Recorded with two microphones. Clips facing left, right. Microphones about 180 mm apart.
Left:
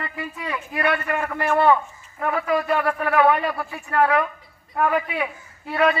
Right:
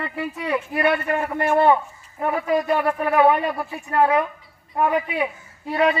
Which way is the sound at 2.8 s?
5° right (ahead or behind).